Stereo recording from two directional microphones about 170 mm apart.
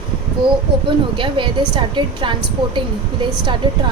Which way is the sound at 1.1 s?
30° right (ahead or behind).